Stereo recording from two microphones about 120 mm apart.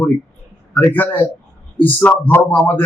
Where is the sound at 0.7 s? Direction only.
15° left (ahead or behind).